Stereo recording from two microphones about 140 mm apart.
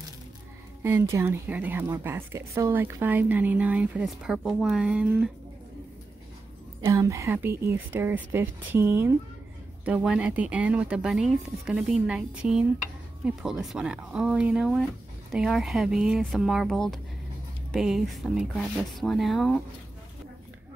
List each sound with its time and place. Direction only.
1.1 s speech: 15° right (ahead or behind)
6.9 s speech: 20° right (ahead or behind); by 19.6 s centre (ahead or behind)